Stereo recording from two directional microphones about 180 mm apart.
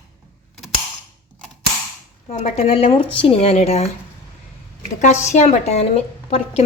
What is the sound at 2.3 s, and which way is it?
Speech, 40° left (ahead or behind).